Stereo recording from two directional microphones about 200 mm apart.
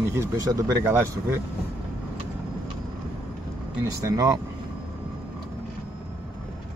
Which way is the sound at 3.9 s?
15° right (ahead or behind).